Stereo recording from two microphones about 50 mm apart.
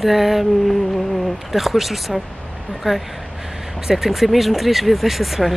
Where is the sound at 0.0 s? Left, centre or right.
Centre.